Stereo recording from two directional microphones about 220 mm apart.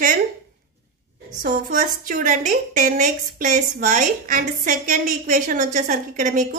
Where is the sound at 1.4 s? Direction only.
40° right (ahead or behind).